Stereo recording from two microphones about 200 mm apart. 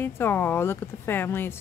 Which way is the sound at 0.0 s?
10° left (ahead or behind).